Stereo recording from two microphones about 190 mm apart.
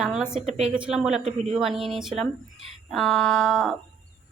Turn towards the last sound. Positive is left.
turn(degrees=0)  # may be behind; listen again after turning